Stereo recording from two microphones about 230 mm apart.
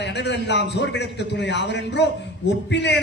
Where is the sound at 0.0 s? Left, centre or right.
Left.